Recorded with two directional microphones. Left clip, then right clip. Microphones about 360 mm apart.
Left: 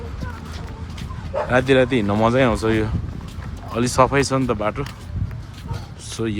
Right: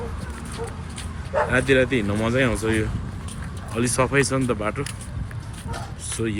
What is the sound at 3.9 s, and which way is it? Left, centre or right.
Speech, centre.